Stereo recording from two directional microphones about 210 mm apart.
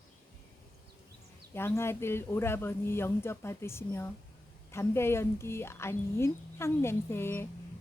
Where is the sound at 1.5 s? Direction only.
10° left (ahead or behind).